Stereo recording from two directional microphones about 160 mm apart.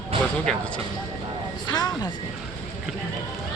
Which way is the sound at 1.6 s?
25° left (ahead or behind).